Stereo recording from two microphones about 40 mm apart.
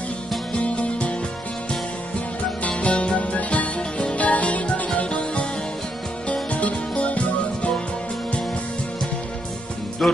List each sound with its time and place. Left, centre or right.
0.6 s music: left
2.8 s music: left
10.0 s music: centre